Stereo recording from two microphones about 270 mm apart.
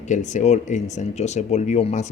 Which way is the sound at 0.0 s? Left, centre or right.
Left.